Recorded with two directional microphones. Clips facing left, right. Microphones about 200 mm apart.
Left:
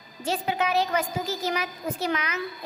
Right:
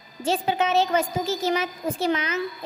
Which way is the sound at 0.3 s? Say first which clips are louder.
Right 3 dB; 25° right (ahead or behind).